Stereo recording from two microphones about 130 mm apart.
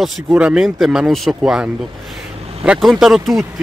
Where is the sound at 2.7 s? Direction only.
Centre (ahead or behind).